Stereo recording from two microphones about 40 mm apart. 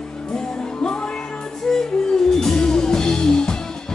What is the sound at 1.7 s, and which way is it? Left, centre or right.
Music, centre.